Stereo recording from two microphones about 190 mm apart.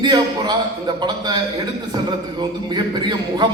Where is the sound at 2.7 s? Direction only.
20° right (ahead or behind).